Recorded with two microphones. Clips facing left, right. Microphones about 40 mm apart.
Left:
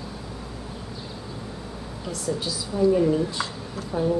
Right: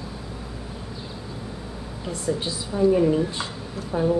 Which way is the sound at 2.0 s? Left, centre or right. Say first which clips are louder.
Right 2 dB; right.